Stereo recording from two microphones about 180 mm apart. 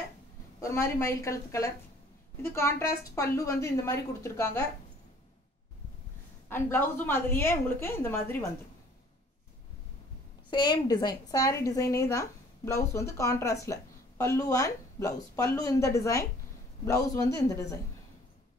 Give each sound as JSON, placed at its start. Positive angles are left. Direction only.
{"t": 0.6, "sound": "a woman's voice", "side_deg": 15}
{"t": 6.5, "sound": "a woman's voice", "side_deg": 10}
{"t": 10.5, "sound": "a woman's voice", "side_deg": 25}